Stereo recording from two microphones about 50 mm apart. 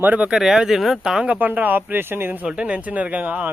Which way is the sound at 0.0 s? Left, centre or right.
Right.